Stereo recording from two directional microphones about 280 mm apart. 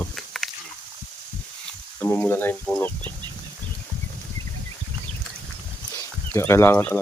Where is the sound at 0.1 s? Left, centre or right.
Centre.